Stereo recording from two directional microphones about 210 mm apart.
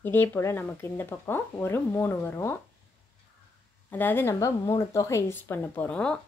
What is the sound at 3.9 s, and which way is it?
Speech, 10° left (ahead or behind).